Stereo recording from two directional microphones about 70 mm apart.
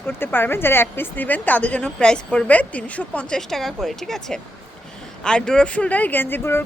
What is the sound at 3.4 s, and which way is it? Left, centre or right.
Speech, centre.